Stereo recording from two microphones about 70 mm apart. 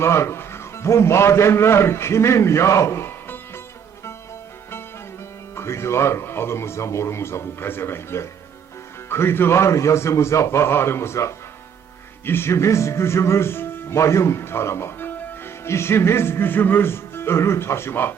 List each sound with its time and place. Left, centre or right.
0.0 s a man's voice: left
5.5 s speech: left
14.0 s speech: left